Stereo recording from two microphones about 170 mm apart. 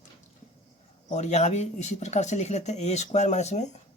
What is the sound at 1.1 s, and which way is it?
Speech, 40° left (ahead or behind).